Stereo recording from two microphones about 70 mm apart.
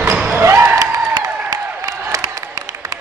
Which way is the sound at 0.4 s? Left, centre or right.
Right.